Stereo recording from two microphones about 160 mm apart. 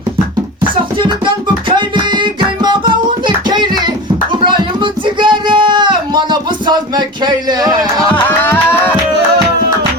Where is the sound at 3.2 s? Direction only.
30° right (ahead or behind).